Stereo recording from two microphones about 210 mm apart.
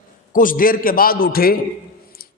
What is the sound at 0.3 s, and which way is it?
A man's voice, 40° left (ahead or behind).